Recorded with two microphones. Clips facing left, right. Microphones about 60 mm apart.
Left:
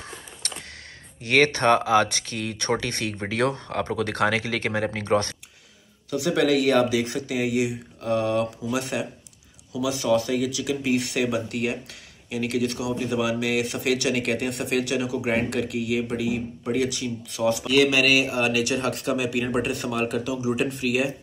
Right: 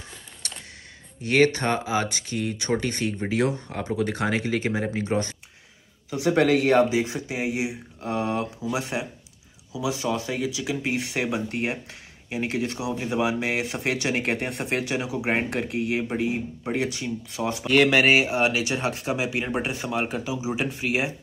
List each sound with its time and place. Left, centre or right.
1.2 s speech: left
6.1 s speech: right
17.6 s speech: right